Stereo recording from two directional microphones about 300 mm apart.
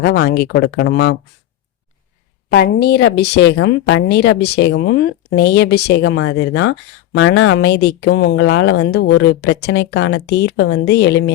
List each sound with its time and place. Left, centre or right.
0.0 s speech: left
2.5 s speech: left